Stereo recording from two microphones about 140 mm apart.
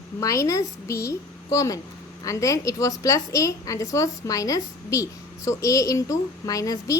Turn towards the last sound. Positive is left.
turn(degrees=25)  # may be behind; listen again after turning